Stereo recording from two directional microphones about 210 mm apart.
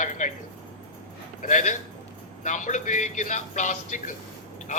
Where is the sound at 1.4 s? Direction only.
35° left (ahead or behind).